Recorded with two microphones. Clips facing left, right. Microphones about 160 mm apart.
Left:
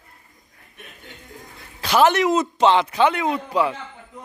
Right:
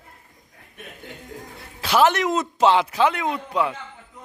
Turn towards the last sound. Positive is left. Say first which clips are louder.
# left 2 dB
turn(degrees=0)  # may be behind; listen again after turning